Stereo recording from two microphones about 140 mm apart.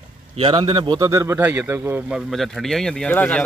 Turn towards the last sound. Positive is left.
turn(degrees=10)  # may be behind; listen again after turning